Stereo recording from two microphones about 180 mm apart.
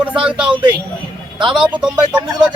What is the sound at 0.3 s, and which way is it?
Speech, 5° right (ahead or behind).